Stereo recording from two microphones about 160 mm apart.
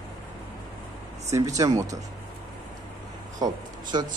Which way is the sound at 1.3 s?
20° right (ahead or behind).